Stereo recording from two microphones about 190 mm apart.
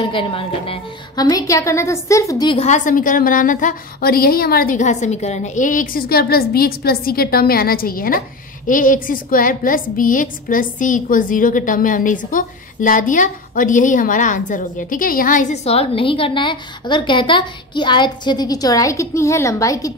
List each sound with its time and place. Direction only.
0.0 s a woman's voice: 25° left (ahead or behind)
2.6 s a woman's voice: 40° left (ahead or behind); by 19.9 s 15° left (ahead or behind)